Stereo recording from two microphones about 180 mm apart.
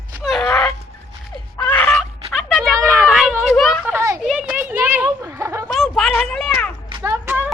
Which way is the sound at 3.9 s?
15° right (ahead or behind).